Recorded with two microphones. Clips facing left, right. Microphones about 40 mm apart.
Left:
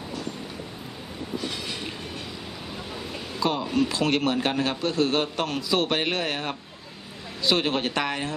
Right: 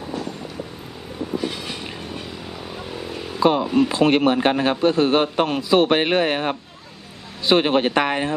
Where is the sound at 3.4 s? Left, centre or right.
Right.